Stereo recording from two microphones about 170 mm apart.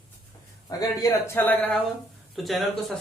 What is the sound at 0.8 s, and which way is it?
Speech, 20° left (ahead or behind).